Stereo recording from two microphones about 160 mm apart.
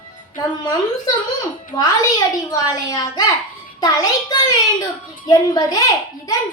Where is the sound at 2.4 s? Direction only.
25° left (ahead or behind).